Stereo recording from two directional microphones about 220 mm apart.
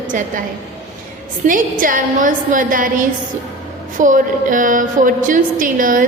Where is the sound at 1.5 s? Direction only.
40° right (ahead or behind).